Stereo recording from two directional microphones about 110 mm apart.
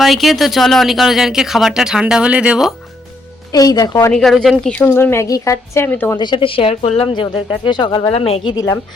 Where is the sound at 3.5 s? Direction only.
35° left (ahead or behind).